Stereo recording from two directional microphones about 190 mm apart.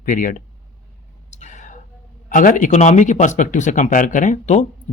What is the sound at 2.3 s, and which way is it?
Speech, 45° left (ahead or behind).